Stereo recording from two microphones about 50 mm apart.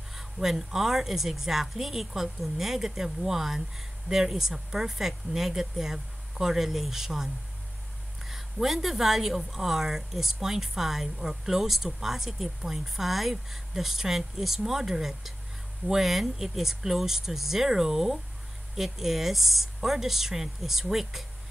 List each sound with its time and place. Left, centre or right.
0.1 s a woman's voice: centre
8.3 s a woman's voice: centre